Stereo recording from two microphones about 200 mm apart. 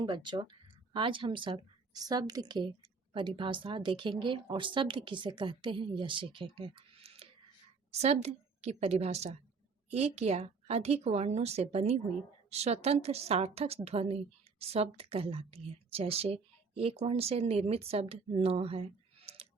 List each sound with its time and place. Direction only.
0.0 s a woman's voice: 25° right (ahead or behind)